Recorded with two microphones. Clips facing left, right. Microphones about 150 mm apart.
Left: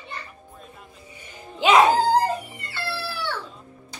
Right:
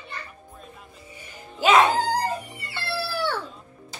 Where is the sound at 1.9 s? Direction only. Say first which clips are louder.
Left 5 dB; 30° left (ahead or behind).